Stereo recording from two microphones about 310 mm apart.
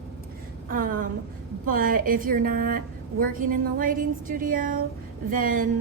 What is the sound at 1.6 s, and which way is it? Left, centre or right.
A woman's voice, right.